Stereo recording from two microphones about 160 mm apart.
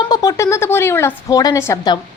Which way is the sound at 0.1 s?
25° left (ahead or behind).